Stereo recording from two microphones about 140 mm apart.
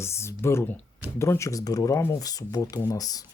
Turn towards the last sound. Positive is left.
turn(degrees=25)  # may be behind; listen again after turning